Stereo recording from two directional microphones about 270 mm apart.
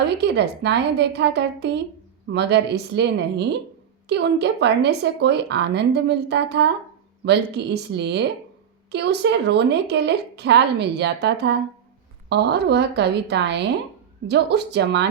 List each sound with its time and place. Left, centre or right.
0.1 s a woman's voice: right